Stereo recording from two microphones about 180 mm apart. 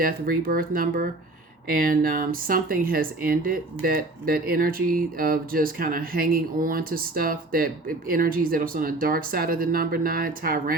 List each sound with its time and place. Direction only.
0.0 s speech: 55° right (ahead or behind)